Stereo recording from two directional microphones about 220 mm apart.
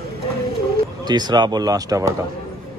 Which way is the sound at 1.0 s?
20° right (ahead or behind).